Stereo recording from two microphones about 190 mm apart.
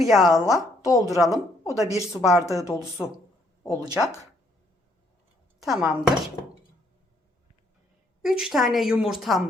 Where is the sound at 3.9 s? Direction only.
15° left (ahead or behind).